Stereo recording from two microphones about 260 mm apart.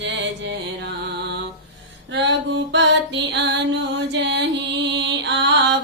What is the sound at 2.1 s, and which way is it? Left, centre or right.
Music, right.